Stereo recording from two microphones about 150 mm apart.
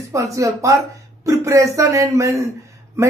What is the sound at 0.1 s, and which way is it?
Speech, 20° right (ahead or behind).